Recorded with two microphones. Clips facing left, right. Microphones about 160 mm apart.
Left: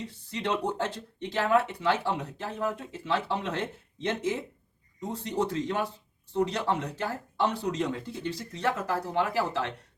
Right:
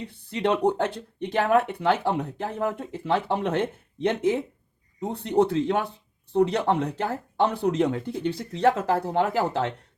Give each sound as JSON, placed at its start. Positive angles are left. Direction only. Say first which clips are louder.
{"t": 0.0, "sound": "speech", "louder": "right 7 dB", "side_deg": -60}